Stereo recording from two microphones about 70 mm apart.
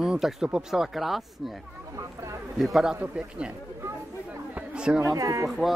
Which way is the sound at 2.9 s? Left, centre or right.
Centre.